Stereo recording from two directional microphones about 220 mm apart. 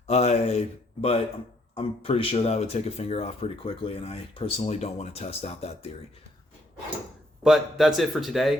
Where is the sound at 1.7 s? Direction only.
25° left (ahead or behind).